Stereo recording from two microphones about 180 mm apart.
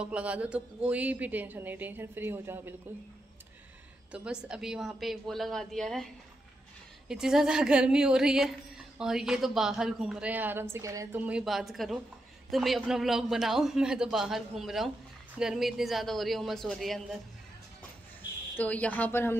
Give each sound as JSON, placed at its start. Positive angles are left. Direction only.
{"t": 0.0, "sound": "speech", "side_deg": -5}
{"t": 4.1, "sound": "a woman's voice", "side_deg": -5}
{"t": 7.1, "sound": "a woman's voice", "side_deg": -5}
{"t": 18.6, "sound": "speech", "side_deg": 10}